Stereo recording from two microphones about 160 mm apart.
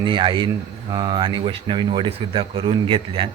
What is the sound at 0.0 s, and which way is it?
A man's voice, 30° right (ahead or behind).